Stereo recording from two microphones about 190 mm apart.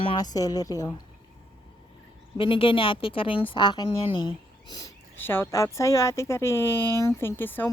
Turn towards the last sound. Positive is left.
turn(degrees=10)  # may be behind; listen again after turning